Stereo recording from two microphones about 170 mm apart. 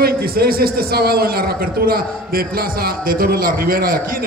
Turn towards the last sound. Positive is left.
turn(degrees=-60)  # may be behind; listen again after turning